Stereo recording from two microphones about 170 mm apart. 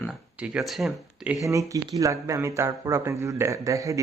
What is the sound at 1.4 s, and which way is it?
A man's voice, 20° right (ahead or behind).